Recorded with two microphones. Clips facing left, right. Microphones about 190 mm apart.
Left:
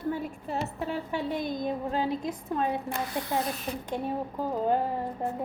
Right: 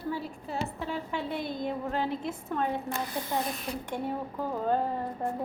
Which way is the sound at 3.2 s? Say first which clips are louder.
Left 2 dB; 15° left (ahead or behind).